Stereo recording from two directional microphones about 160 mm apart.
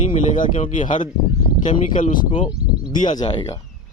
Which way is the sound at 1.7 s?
50° left (ahead or behind).